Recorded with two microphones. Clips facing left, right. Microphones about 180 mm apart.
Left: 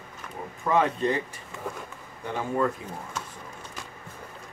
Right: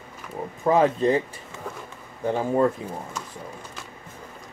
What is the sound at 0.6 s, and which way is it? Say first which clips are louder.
Speech: right 5 dB; 30° right (ahead or behind).